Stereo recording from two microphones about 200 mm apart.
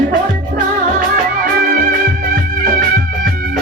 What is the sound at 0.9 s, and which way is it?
Music, 50° right (ahead or behind).